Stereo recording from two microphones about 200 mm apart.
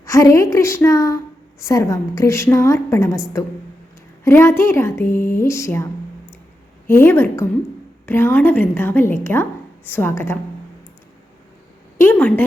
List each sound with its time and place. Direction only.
0.0 s speech: 15° left (ahead or behind)
4.2 s speech: 10° left (ahead or behind)
11.9 s speech: 10° left (ahead or behind)